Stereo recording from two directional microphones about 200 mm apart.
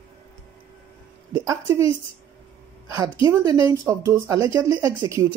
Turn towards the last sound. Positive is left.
turn(degrees=-15)  # may be behind; listen again after turning